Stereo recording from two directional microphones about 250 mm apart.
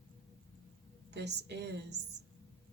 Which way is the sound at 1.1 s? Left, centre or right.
Right.